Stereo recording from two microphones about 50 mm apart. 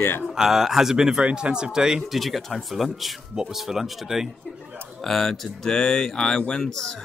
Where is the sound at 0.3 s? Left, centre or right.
Centre.